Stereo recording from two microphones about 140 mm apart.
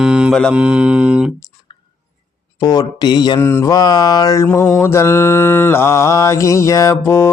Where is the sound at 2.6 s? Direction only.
30° left (ahead or behind).